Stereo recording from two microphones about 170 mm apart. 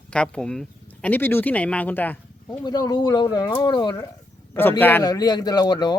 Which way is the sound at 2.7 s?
25° left (ahead or behind).